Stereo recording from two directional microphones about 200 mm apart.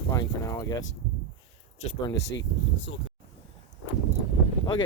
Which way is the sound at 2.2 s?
60° left (ahead or behind).